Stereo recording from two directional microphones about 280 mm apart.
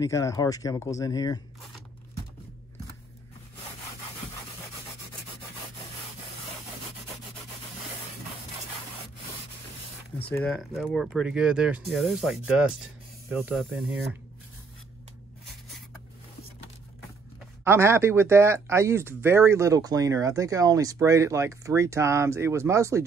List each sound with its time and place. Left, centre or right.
0.0 s speech: centre
10.1 s speech: centre
10.4 s speech: centre
17.6 s speech: centre